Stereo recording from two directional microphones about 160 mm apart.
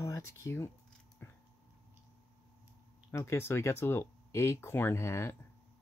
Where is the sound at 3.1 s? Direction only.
15° left (ahead or behind).